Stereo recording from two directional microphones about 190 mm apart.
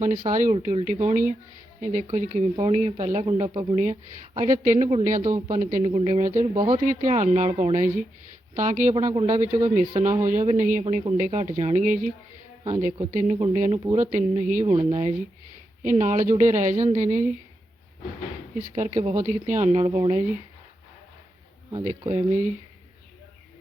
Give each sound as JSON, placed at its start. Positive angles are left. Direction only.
{"t": 0.3, "sound": "speech", "side_deg": -45}
{"t": 4.4, "sound": "speech", "side_deg": -40}
{"t": 5.8, "sound": "speech", "side_deg": -30}
{"t": 18.9, "sound": "speech", "side_deg": -40}
{"t": 22.0, "sound": "speech", "side_deg": -30}